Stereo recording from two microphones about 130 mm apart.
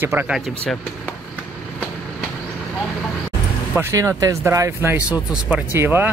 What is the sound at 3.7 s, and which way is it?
Speech, 20° right (ahead or behind).